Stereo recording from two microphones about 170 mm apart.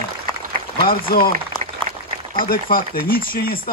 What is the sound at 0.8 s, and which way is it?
Speech, 60° left (ahead or behind).